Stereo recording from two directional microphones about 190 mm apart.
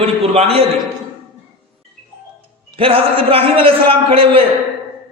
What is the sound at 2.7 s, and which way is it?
A man's voice, 30° right (ahead or behind).